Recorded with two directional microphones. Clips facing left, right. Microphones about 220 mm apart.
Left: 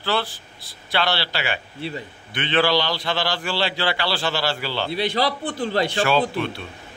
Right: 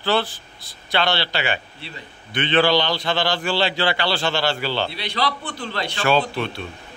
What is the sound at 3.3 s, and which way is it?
Speech, 25° right (ahead or behind).